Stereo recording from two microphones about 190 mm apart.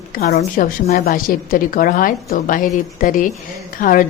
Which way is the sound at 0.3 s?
45° left (ahead or behind).